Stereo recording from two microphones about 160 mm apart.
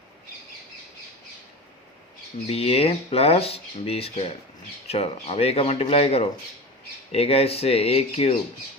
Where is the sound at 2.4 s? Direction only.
40° left (ahead or behind).